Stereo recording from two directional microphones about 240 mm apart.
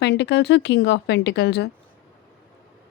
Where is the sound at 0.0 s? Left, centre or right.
Left.